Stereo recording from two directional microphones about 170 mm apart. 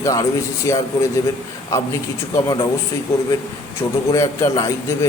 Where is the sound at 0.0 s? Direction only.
20° left (ahead or behind).